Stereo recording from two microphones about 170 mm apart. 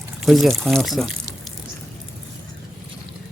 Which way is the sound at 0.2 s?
Centre (ahead or behind).